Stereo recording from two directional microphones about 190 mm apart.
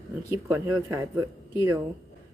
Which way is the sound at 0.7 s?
15° right (ahead or behind).